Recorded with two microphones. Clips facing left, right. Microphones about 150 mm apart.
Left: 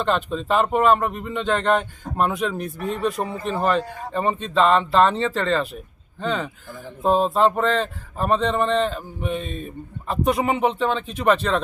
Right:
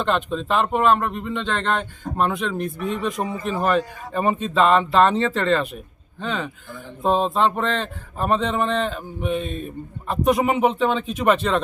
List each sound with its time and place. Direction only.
0.0 s speech: centre (ahead or behind)
2.7 s speech: 40° left (ahead or behind)
3.4 s speech: 5° right (ahead or behind)